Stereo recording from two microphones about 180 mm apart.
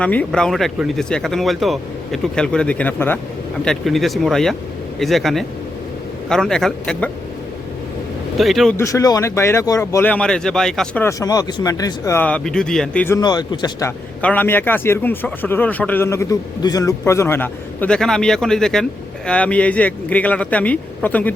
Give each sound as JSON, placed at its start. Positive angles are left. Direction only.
{"t": 0.0, "sound": "speech", "side_deg": 10}
{"t": 8.4, "sound": "speech", "side_deg": 0}
{"t": 8.8, "sound": "a man's voice", "side_deg": 20}
{"t": 13.1, "sound": "speech", "side_deg": 20}
{"t": 14.2, "sound": "a man's voice", "side_deg": 10}